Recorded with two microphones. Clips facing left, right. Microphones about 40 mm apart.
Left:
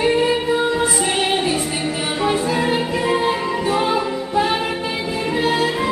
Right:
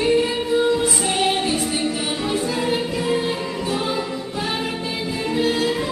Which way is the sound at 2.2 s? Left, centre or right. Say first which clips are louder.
Left 5 dB; centre.